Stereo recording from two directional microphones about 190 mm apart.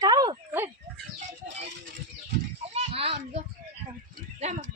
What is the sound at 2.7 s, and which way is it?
Children playing, 30° right (ahead or behind).